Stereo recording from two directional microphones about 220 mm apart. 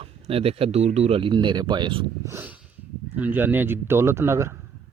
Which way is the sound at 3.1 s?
10° right (ahead or behind).